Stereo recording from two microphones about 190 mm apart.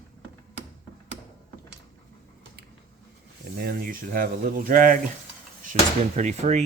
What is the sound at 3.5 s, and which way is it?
Speech, 55° right (ahead or behind).